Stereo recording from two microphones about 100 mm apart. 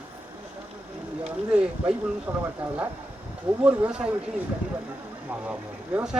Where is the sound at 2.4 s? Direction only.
20° right (ahead or behind).